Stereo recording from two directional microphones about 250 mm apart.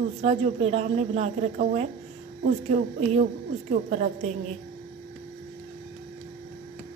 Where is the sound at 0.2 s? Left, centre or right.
Right.